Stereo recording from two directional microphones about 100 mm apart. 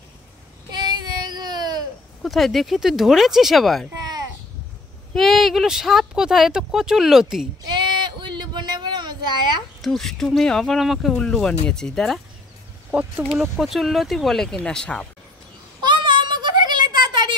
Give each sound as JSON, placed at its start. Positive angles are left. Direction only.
{"t": 0.7, "sound": "child singing", "side_deg": -45}
{"t": 2.2, "sound": "speech", "side_deg": 0}
{"t": 5.1, "sound": "speech", "side_deg": 0}
{"t": 7.6, "sound": "a sound", "side_deg": -50}
{"t": 9.8, "sound": "speech", "side_deg": 0}
{"t": 13.4, "sound": "speech", "side_deg": -5}
{"t": 15.8, "sound": "a sound", "side_deg": -50}